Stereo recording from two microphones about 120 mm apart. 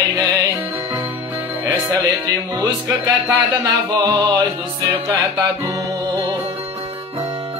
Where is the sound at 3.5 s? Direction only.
25° right (ahead or behind).